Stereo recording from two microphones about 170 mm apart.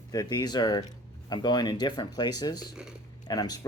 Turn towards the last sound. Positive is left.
turn(degrees=25)  # may be behind; listen again after turning